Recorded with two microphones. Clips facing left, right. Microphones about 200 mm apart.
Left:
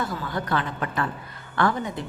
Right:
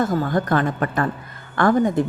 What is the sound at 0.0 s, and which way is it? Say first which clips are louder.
A woman's voice: right 9 dB; 45° right (ahead or behind).